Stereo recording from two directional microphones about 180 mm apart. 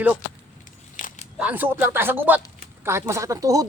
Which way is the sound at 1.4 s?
10° right (ahead or behind).